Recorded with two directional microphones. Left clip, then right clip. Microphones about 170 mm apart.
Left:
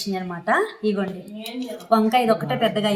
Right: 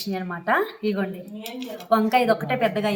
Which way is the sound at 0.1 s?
10° right (ahead or behind).